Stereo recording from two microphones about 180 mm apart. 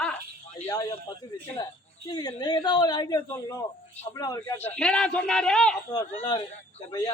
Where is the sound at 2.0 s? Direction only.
20° left (ahead or behind); by 5.7 s 5° left (ahead or behind).